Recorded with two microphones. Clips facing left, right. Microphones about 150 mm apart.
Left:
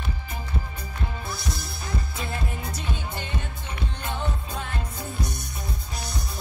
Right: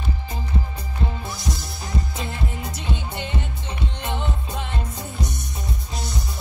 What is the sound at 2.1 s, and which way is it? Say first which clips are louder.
Music: right 2 dB; 20° right (ahead or behind).